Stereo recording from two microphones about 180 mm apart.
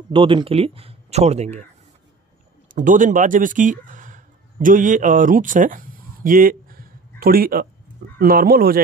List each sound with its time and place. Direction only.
0.1 s speech: 30° right (ahead or behind)
2.7 s speech: 45° right (ahead or behind)